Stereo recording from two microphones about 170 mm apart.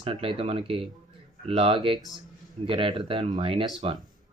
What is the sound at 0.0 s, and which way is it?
Speech, 35° right (ahead or behind).